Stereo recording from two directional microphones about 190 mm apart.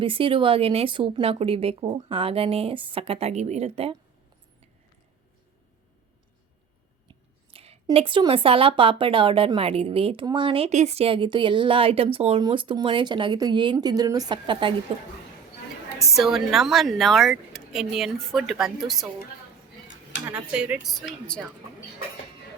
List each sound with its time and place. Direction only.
0.0 s speech: 30° right (ahead or behind)
7.1 s a sound: 30° right (ahead or behind)
7.9 s speech: 25° right (ahead or behind)
16.1 s speech: centre (ahead or behind)
20.3 s speech: 5° right (ahead or behind)